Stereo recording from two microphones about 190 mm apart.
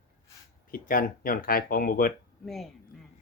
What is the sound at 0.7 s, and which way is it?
Speech, 50° left (ahead or behind).